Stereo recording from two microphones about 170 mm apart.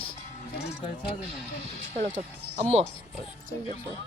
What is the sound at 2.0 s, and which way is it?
Speech, 50° right (ahead or behind).